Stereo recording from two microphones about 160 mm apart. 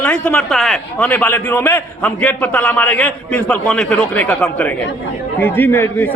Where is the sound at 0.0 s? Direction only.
5° left (ahead or behind).